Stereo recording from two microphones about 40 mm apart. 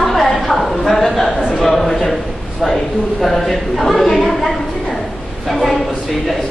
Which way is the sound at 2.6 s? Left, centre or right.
Centre.